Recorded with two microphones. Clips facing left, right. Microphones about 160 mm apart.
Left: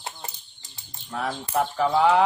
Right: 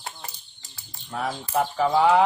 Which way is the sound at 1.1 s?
Centre (ahead or behind).